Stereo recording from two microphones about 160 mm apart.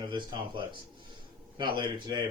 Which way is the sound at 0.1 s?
30° right (ahead or behind).